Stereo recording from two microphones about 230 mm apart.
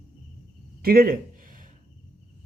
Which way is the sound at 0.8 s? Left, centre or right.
Right.